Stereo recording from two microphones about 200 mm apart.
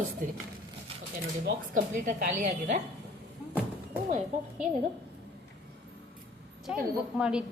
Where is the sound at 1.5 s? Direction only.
45° right (ahead or behind).